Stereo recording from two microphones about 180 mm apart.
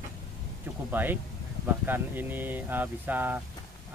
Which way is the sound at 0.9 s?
10° right (ahead or behind).